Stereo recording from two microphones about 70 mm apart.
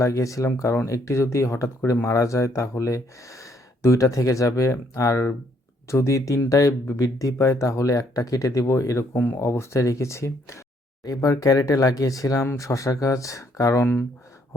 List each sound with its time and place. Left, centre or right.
0.0 s speech: left
9.1 s speech: left
9.4 s speech: left